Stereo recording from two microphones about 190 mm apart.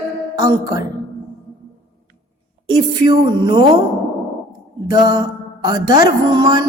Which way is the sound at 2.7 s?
20° right (ahead or behind).